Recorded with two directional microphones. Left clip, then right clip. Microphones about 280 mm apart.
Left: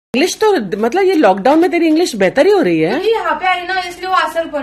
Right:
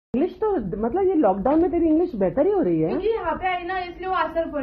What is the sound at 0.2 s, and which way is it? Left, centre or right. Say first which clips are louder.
Speech: left 11 dB; left.